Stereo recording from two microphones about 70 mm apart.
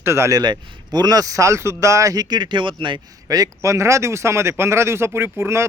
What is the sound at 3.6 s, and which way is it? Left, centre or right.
Speech, right.